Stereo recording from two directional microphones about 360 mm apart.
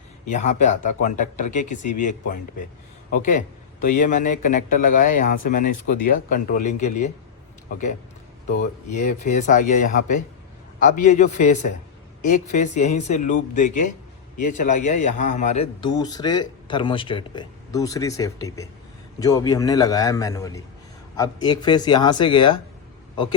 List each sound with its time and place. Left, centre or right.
0.3 s speech: centre
8.4 s speech: centre